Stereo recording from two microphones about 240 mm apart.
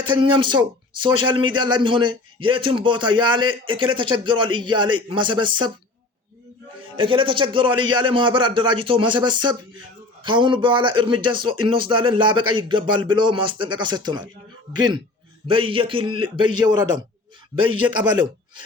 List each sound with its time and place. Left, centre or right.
0.0 s speech: right
6.9 s speech: right
17.8 s speech: centre